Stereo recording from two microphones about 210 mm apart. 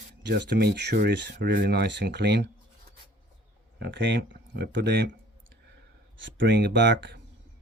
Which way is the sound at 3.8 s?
55° right (ahead or behind).